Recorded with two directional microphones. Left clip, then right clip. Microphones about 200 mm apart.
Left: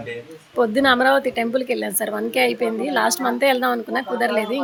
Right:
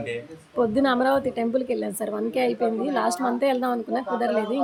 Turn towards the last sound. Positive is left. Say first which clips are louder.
# left 3 dB
turn(degrees=-5)  # may be behind; listen again after turning